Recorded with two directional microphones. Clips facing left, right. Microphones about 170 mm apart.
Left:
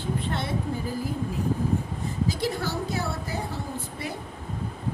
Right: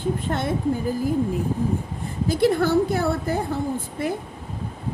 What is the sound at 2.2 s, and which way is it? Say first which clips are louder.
A woman's voice: right 9 dB; 55° right (ahead or behind).